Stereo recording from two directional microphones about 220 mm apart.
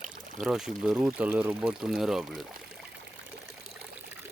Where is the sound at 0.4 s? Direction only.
Centre (ahead or behind).